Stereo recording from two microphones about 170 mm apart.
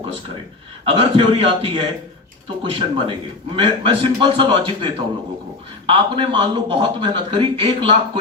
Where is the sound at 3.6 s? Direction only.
30° right (ahead or behind).